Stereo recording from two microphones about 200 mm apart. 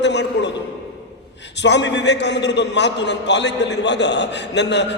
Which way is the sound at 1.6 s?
60° left (ahead or behind).